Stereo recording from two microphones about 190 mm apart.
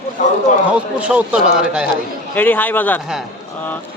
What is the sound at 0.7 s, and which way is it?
A man's voice, 5° right (ahead or behind).